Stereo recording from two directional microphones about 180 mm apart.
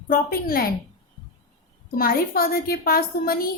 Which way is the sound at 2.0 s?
55° left (ahead or behind).